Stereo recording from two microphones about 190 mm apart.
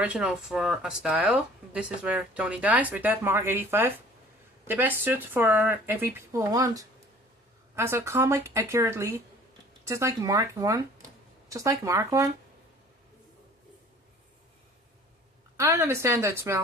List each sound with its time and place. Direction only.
0.0 s speech: 5° right (ahead or behind)
15.5 s speech: 15° right (ahead or behind)